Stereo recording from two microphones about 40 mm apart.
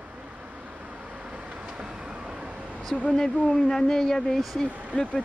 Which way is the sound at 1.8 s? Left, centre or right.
Right.